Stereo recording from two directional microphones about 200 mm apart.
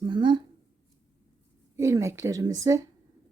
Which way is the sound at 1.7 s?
15° right (ahead or behind).